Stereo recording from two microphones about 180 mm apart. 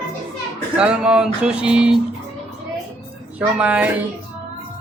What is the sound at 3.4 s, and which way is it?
Speech, 5° right (ahead or behind).